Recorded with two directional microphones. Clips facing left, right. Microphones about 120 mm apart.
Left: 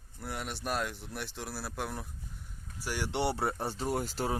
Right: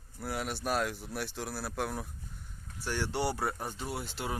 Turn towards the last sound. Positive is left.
turn(degrees=40)  # may be behind; listen again after turning